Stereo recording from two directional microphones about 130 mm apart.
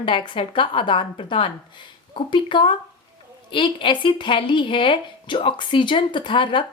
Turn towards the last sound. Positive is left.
turn(degrees=40)  # may be behind; listen again after turning